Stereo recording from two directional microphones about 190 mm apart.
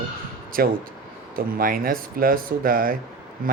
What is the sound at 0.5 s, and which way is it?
Speech, 50° right (ahead or behind).